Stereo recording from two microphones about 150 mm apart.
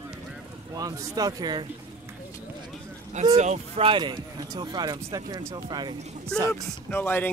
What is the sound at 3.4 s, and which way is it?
Speech, 45° right (ahead or behind).